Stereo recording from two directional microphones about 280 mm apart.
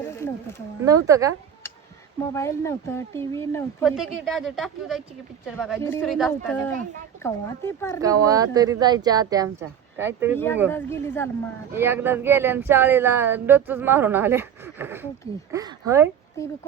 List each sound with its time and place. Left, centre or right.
0.0 s a sound: centre
0.9 s speech: centre
2.3 s speech: centre
3.8 s a woman's voice: centre
8.0 s speech: centre
10.3 s speech: centre
11.7 s speech: centre